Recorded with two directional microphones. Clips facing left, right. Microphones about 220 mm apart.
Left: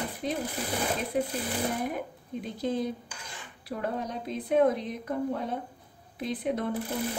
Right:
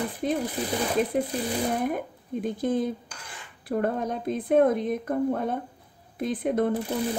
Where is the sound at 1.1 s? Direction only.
50° right (ahead or behind).